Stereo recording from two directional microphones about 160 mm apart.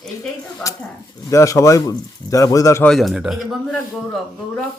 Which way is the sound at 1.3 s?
20° left (ahead or behind).